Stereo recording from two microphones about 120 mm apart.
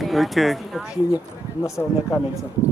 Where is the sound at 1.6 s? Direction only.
25° left (ahead or behind).